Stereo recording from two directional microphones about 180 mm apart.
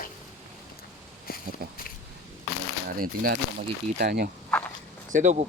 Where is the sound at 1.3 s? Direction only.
55° left (ahead or behind).